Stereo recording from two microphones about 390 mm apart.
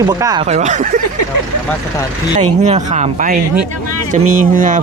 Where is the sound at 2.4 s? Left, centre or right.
Centre.